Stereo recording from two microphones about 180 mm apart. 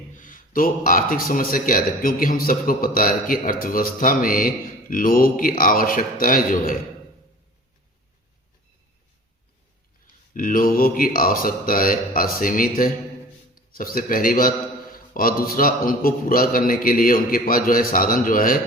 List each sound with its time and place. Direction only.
0.1 s a man's voice: 45° left (ahead or behind)
10.3 s a man's voice: 50° left (ahead or behind)